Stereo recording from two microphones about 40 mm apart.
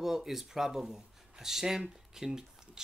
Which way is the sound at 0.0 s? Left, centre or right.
Centre.